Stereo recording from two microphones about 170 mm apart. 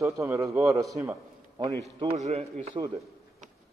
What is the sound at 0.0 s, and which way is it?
Speech, 15° right (ahead or behind).